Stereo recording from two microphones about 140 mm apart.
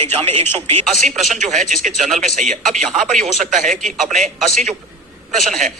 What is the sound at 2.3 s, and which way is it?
Speech, 65° right (ahead or behind).